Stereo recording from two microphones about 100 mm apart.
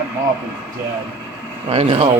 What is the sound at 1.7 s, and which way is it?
Speech, 70° right (ahead or behind).